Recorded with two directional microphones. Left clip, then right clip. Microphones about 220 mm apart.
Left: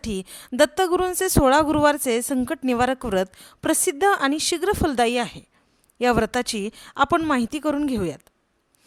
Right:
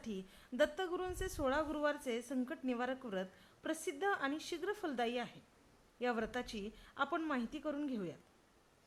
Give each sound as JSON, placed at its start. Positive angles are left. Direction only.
{"t": 0.0, "sound": "speech", "side_deg": 45}